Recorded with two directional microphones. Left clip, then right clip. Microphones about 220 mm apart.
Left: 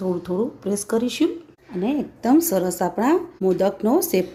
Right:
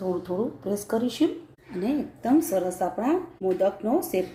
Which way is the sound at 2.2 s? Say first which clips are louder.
Left 5 dB; 45° left (ahead or behind).